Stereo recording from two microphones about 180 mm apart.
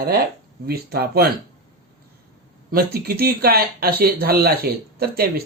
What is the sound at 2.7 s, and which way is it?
Speech, 60° right (ahead or behind).